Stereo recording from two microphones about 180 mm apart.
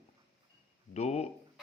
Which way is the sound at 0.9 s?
35° left (ahead or behind).